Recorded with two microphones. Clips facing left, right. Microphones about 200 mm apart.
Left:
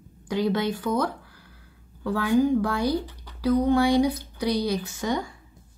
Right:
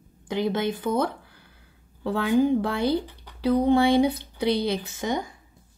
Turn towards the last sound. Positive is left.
turn(degrees=-20)  # may be behind; listen again after turning